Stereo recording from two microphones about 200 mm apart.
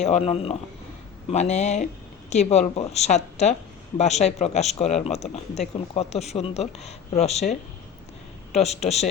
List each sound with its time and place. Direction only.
0.0 s speech: 30° left (ahead or behind)
8.5 s speech: 35° left (ahead or behind)